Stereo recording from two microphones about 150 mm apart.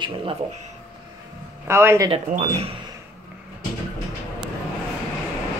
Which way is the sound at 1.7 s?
15° right (ahead or behind).